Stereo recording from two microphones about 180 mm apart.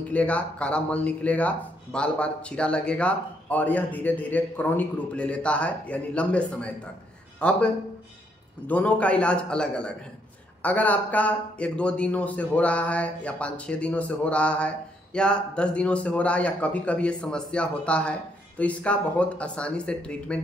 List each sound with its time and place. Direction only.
0.0 s speech: 5° left (ahead or behind)